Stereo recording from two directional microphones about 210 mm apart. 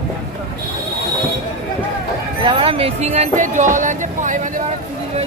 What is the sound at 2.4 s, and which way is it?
Music, 25° right (ahead or behind).